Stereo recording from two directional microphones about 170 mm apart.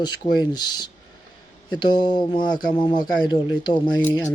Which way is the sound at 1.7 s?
25° left (ahead or behind).